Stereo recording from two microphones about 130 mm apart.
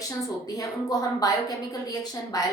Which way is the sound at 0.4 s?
30° left (ahead or behind).